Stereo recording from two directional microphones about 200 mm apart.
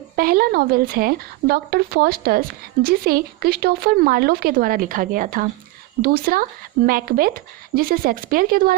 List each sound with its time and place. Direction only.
0.2 s speech: 45° right (ahead or behind)